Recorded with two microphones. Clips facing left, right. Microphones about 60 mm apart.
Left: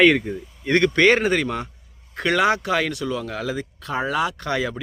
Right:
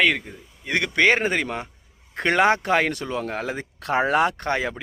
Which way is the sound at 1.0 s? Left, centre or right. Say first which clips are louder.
Right 2 dB; centre.